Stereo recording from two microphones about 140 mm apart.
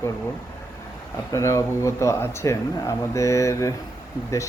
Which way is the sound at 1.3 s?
20° left (ahead or behind).